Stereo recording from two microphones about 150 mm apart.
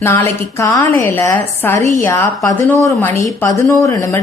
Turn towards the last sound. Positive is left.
turn(degrees=20)  # may be behind; listen again after turning